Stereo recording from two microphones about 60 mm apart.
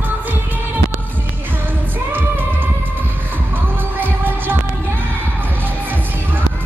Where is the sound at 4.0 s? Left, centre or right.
Right.